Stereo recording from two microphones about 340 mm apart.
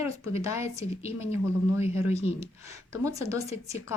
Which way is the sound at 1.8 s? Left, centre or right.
Centre.